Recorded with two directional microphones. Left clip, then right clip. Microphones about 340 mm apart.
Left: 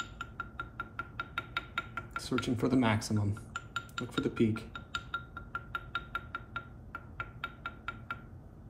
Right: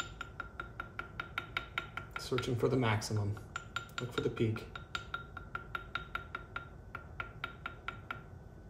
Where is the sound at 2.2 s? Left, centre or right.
Left.